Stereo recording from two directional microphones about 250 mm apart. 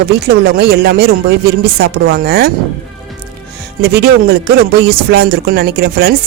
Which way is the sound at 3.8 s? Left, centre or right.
Right.